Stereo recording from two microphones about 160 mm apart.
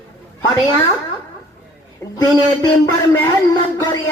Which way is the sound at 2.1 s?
15° left (ahead or behind).